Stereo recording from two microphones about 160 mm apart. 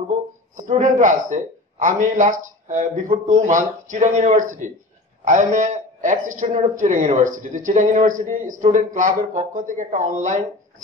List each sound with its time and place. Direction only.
0.6 s a man's voice: 50° right (ahead or behind)